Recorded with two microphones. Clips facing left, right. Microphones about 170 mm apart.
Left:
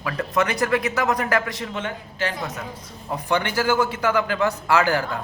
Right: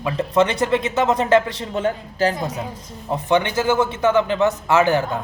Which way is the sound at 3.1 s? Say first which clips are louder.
Right 5 dB; 20° right (ahead or behind).